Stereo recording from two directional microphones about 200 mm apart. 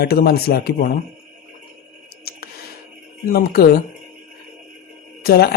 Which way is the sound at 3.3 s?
50° left (ahead or behind).